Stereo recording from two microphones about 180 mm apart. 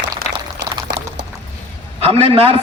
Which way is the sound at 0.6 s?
75° right (ahead or behind).